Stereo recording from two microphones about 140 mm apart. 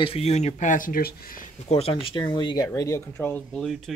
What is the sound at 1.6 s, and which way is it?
Speech, 50° left (ahead or behind).